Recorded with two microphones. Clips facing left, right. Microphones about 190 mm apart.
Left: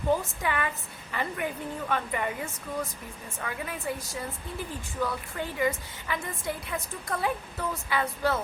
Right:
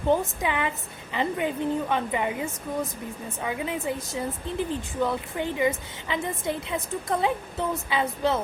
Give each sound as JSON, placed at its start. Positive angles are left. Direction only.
{"t": 0.1, "sound": "a woman's voice", "side_deg": -20}